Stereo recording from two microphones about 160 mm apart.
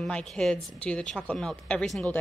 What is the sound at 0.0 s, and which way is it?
A woman's voice, 5° left (ahead or behind).